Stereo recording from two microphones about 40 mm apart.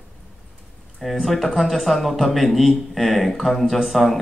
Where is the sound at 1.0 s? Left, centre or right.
Centre.